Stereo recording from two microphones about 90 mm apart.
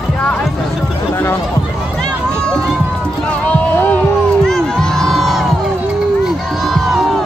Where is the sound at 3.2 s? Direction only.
15° left (ahead or behind).